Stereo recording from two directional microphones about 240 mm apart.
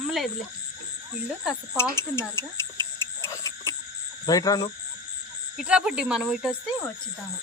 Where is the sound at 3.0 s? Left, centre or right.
Centre.